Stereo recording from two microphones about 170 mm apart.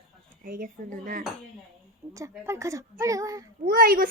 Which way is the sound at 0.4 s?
55° right (ahead or behind).